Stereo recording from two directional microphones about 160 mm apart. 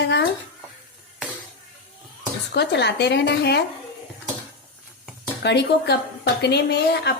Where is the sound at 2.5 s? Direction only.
90° left.